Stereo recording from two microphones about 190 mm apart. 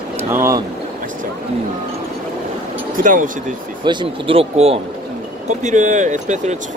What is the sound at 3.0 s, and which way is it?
Speech, 45° right (ahead or behind).